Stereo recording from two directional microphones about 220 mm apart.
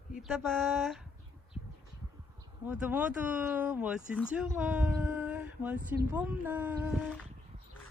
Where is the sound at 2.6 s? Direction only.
5° right (ahead or behind).